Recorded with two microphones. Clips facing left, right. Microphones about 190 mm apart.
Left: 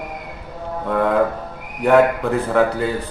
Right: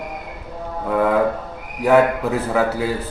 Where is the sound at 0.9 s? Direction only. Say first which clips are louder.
Even; 5° right (ahead or behind).